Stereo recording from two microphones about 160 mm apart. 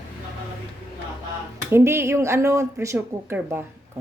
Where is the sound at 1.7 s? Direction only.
15° right (ahead or behind).